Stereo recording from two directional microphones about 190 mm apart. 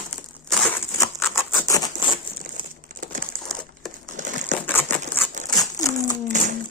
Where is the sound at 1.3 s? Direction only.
20° left (ahead or behind).